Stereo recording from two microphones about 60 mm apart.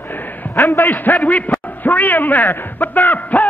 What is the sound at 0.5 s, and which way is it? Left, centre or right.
Speech, left.